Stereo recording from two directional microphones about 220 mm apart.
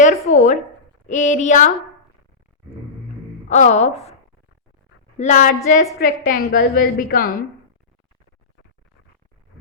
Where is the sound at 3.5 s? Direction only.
30° left (ahead or behind).